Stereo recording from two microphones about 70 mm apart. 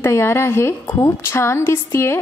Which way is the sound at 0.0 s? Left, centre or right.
Left.